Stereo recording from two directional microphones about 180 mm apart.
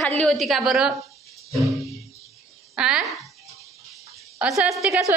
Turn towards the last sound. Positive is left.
turn(degrees=-5)  # may be behind; listen again after turning